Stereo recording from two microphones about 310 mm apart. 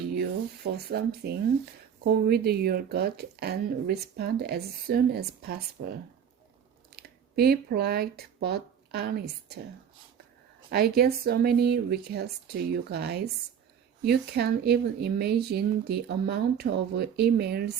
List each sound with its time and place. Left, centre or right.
0.1 s speech: right
10.7 s speech: right